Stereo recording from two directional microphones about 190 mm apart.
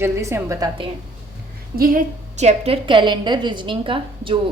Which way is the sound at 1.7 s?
50° right (ahead or behind).